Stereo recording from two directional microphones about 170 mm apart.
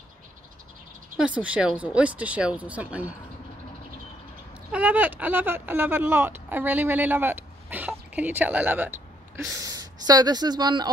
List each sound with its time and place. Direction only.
1.1 s speech: 5° right (ahead or behind)
4.6 s speech: 10° right (ahead or behind); by 10.9 s 25° right (ahead or behind)